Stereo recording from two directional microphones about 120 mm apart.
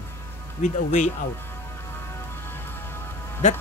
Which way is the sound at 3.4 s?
90° left.